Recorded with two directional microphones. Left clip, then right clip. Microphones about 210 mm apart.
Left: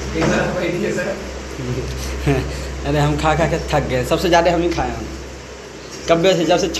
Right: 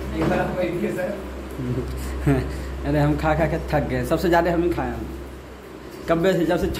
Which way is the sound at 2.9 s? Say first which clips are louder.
Left 4 dB; 20° right (ahead or behind).